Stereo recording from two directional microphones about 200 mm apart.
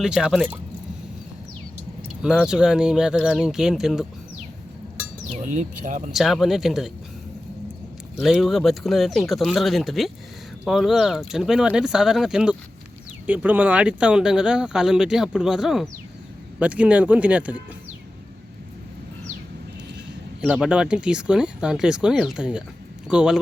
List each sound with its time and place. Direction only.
0.0 s speech: 5° right (ahead or behind)
2.2 s speech: 5° right (ahead or behind)
5.3 s speech: 35° right (ahead or behind)
6.1 s speech: centre (ahead or behind)
8.2 s speech: centre (ahead or behind)
20.4 s speech: 5° right (ahead or behind)